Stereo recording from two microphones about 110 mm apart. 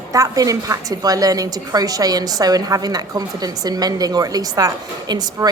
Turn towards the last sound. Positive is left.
turn(degrees=-35)  # may be behind; listen again after turning